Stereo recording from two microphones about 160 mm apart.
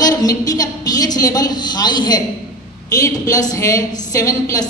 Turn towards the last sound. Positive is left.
turn(degrees=20)  # may be behind; listen again after turning